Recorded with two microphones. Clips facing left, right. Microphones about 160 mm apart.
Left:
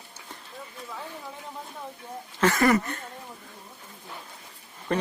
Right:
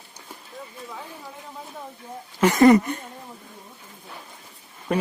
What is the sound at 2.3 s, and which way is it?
Speech, 20° right (ahead or behind).